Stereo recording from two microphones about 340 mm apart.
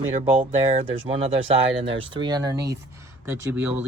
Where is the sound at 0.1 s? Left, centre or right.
Centre.